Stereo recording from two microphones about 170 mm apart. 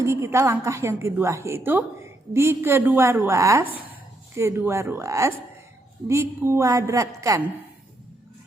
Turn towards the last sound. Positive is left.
turn(degrees=-20)  # may be behind; listen again after turning